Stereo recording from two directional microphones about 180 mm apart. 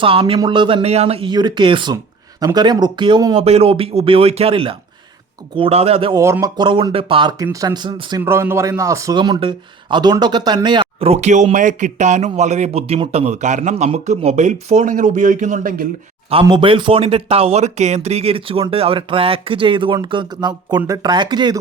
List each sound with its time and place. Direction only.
0.0 s a man's voice: 30° right (ahead or behind)
3.3 s a man's voice: 35° right (ahead or behind)
6.1 s a man's voice: 15° right (ahead or behind)
8.2 s a man's voice: 15° right (ahead or behind); by 15.9 s 45° right (ahead or behind)
16.3 s a man's voice: 30° right (ahead or behind)